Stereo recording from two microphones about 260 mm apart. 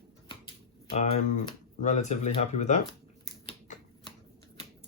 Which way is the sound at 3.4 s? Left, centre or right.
Left.